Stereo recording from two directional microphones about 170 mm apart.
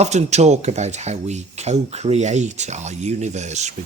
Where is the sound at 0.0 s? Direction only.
40° right (ahead or behind).